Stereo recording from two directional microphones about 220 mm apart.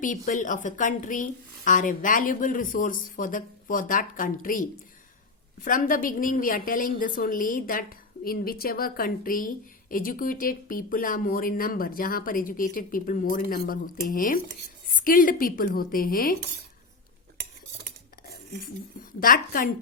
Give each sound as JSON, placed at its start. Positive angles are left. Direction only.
{"t": 0.0, "sound": "a woman's voice", "side_deg": 35}
{"t": 5.6, "sound": "a woman's voice", "side_deg": 40}
{"t": 19.2, "sound": "a woman's voice", "side_deg": 40}